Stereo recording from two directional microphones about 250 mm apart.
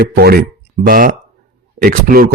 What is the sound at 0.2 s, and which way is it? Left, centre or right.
Speech, right.